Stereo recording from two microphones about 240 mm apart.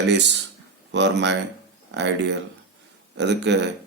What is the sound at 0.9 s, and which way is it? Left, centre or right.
Speech, right.